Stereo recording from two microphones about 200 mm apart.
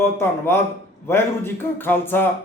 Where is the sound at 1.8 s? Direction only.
10° left (ahead or behind).